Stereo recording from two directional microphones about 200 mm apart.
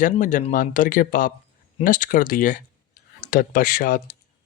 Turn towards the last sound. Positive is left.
turn(degrees=45)  # may be behind; listen again after turning